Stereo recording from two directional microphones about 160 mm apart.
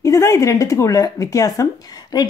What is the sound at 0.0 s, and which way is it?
Speech, 20° left (ahead or behind).